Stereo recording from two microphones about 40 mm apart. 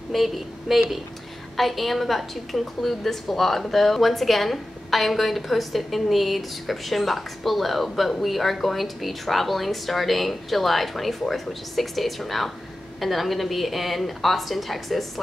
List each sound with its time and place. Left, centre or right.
0.1 s a woman's voice: centre